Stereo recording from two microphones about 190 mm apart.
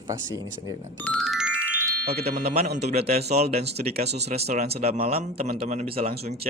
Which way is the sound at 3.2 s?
35° right (ahead or behind).